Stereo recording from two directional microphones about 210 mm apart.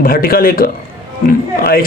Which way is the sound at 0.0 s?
45° left (ahead or behind).